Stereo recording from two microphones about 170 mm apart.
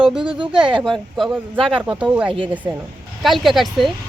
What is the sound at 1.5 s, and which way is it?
Speech, 30° right (ahead or behind).